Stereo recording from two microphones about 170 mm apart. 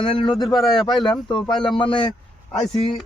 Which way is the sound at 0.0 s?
30° left (ahead or behind).